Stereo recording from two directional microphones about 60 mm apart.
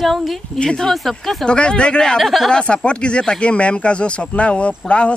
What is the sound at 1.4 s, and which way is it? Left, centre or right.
Speech, centre.